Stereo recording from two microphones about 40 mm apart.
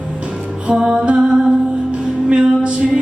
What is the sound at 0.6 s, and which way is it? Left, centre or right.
Music, right.